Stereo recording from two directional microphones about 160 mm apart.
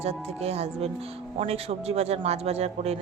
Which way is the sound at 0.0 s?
40° right (ahead or behind).